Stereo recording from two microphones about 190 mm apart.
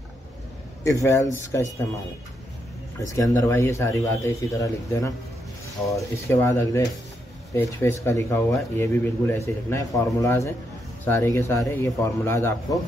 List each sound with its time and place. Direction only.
0.8 s speech: 15° left (ahead or behind)
3.2 s speech: 15° left (ahead or behind)